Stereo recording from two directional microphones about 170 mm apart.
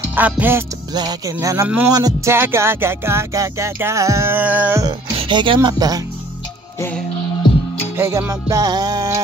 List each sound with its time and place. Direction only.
0.1 s music: 10° right (ahead or behind)
0.9 s music: 25° right (ahead or behind)
4.8 s speech: 30° right (ahead or behind)
6.8 s music: 10° left (ahead or behind)
7.9 s music: 15° right (ahead or behind)